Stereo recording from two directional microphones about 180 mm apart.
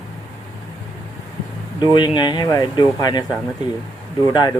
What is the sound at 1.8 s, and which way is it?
Speech, 25° left (ahead or behind).